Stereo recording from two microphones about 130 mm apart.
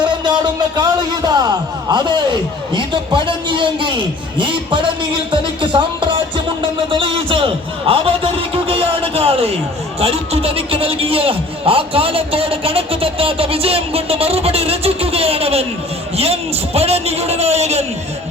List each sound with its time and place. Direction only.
0.0 s music: 35° right (ahead or behind)
0.8 s a man's voice: 30° right (ahead or behind); by 17.8 s 55° right (ahead or behind)